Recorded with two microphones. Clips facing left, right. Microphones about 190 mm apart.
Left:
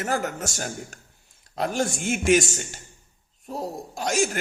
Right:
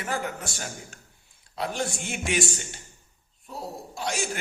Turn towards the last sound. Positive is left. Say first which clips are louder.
# left 6 dB
turn(degrees=45)  # may be behind; listen again after turning